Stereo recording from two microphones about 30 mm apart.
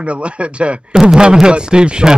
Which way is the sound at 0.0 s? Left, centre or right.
Right.